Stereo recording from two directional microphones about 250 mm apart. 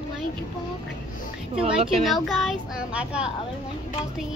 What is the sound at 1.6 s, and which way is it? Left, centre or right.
Speech, right.